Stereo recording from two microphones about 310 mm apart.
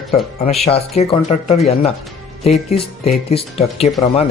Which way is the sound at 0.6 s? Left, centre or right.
Centre.